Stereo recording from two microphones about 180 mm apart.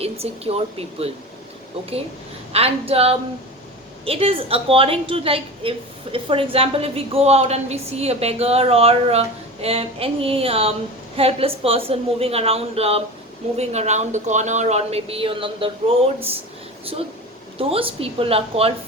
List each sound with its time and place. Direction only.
0.0 s a woman's voice: 35° right (ahead or behind)
2.5 s a woman's voice: 35° right (ahead or behind)
17.6 s a woman's voice: 30° right (ahead or behind)